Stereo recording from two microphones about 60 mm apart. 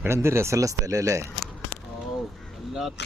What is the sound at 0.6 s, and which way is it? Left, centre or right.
Speech, right.